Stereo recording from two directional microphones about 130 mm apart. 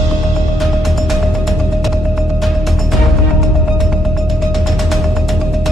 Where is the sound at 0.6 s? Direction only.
Centre (ahead or behind).